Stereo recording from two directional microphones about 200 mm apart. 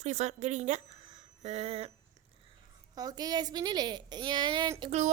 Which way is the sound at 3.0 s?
20° right (ahead or behind).